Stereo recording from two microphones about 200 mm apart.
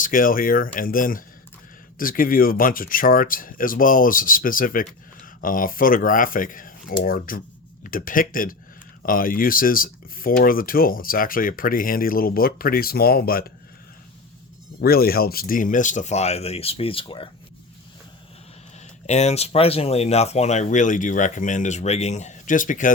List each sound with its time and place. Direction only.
0.0 s speech: 45° left (ahead or behind)
14.8 s speech: 50° left (ahead or behind); by 17.2 s 25° left (ahead or behind)
19.0 s speech: 35° left (ahead or behind)